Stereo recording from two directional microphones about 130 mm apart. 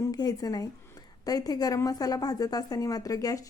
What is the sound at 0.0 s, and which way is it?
A woman's voice, 30° left (ahead or behind).